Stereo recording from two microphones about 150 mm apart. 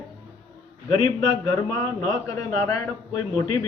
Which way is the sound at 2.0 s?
20° left (ahead or behind).